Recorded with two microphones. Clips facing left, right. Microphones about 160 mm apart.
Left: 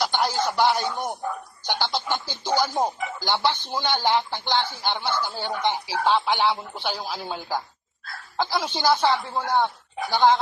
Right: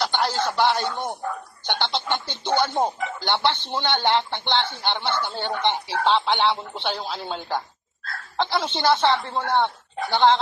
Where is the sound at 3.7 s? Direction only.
5° left (ahead or behind).